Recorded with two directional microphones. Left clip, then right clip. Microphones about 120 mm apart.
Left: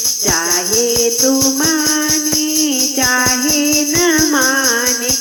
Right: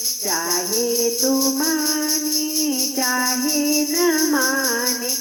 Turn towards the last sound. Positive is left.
turn(degrees=35)  # may be behind; listen again after turning